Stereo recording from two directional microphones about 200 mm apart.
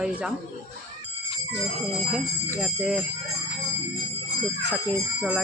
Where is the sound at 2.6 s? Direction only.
Centre (ahead or behind).